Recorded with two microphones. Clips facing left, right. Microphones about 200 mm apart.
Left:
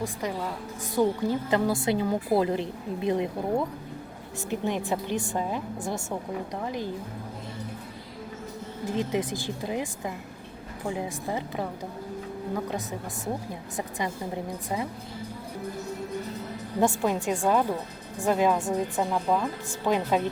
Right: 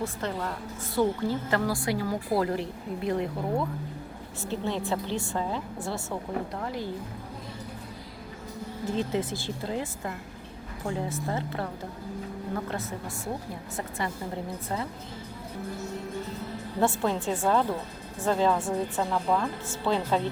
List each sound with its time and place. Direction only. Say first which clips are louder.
0.0 s a woman's voice: left 1 dB; 10° left (ahead or behind)
8.9 s a woman's voice: left 1 dB; 15° left (ahead or behind)
16.8 s a woman's voice: left 1 dB; 15° left (ahead or behind)